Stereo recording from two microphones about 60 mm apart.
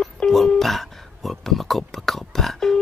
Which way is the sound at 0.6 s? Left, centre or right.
Centre.